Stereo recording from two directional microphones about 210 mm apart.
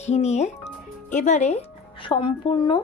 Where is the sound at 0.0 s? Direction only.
30° left (ahead or behind).